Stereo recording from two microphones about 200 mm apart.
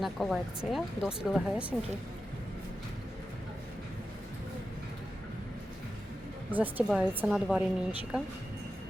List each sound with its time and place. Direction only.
0.0 s speech: centre (ahead or behind)
6.5 s a woman's voice: 10° right (ahead or behind)